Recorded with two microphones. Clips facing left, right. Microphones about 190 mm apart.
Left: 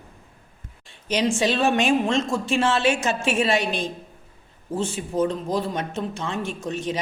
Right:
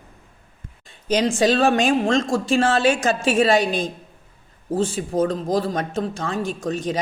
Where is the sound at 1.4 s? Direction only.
35° right (ahead or behind).